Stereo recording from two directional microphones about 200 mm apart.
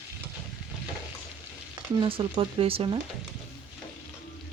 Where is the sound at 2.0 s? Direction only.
25° right (ahead or behind).